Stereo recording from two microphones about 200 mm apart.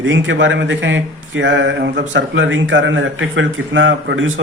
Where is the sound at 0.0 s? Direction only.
70° right (ahead or behind).